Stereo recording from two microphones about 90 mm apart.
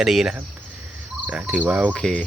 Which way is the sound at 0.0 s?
5° right (ahead or behind).